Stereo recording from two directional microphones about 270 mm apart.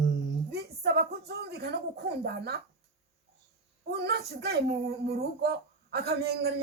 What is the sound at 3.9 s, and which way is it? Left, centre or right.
Speech, right.